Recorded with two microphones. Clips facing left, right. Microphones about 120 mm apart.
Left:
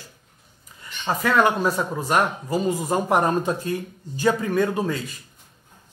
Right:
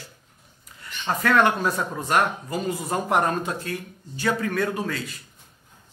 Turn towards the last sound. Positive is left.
turn(degrees=15)  # may be behind; listen again after turning